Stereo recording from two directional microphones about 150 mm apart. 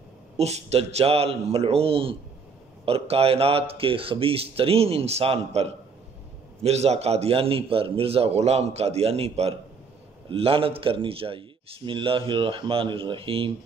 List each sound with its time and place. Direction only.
0.4 s a man's voice: 45° right (ahead or behind)